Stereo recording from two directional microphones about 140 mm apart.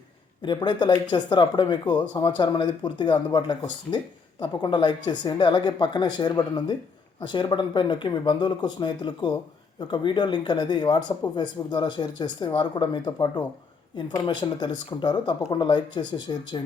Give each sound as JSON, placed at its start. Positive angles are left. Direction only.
{"t": 0.4, "sound": "speech", "side_deg": 35}